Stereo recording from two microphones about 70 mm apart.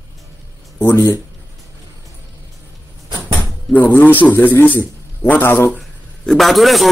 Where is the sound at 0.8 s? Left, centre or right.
Left.